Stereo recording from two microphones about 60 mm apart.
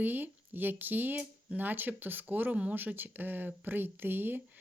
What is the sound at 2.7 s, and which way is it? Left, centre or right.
Speech, right.